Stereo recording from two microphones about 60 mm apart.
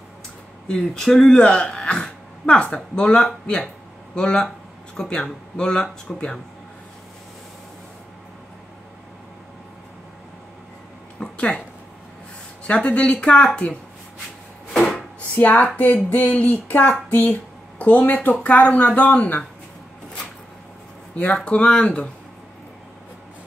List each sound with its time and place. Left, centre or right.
0.7 s speech: centre
11.1 s a sound: centre
12.6 s speech: left
14.7 s wood: centre
15.1 s speech: left
21.1 s speech: left